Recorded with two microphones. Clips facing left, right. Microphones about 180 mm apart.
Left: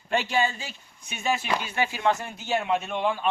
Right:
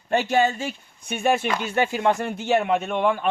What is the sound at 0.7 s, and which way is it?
A man's voice, 55° right (ahead or behind).